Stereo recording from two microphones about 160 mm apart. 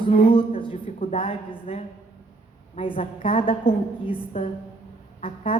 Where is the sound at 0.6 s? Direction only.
35° left (ahead or behind).